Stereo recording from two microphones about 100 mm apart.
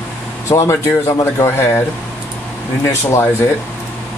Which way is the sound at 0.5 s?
30° left (ahead or behind).